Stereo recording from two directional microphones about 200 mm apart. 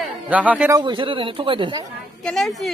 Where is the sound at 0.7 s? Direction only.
25° right (ahead or behind).